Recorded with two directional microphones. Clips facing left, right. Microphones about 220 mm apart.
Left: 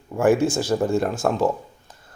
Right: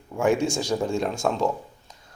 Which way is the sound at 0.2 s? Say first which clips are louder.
Left 4 dB; 5° left (ahead or behind).